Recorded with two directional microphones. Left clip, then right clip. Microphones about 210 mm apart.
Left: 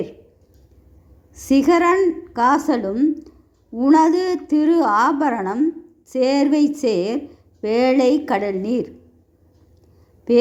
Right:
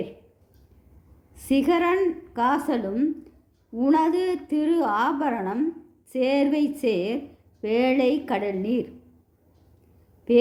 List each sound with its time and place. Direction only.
1.3 s a child's voice: 20° left (ahead or behind)
10.3 s a woman's voice: 20° left (ahead or behind)